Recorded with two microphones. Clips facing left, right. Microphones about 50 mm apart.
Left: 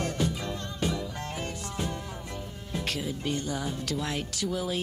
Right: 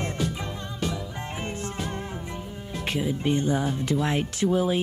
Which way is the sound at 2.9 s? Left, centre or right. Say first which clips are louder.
Right 7 dB; right.